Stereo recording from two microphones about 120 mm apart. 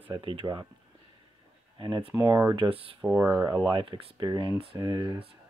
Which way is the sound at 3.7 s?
45° right (ahead or behind).